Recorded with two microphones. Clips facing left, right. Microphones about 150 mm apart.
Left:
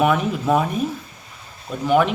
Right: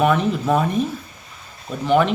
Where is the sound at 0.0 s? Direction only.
10° left (ahead or behind).